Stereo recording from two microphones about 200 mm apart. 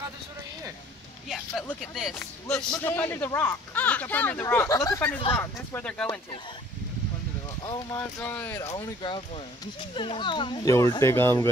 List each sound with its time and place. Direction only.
1.3 s a sound: centre (ahead or behind)
2.5 s speech: 5° left (ahead or behind)
7.6 s speech: 15° left (ahead or behind)
10.7 s speech: 15° left (ahead or behind)